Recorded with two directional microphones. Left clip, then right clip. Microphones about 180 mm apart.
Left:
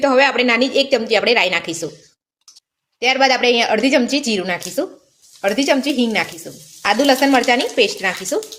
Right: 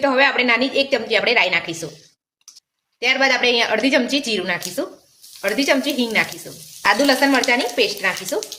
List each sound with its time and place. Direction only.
0.0 s speech: 45° left (ahead or behind)
3.0 s a woman's voice: 45° left (ahead or behind)